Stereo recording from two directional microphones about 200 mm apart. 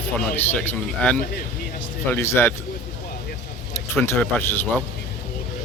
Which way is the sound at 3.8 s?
10° left (ahead or behind).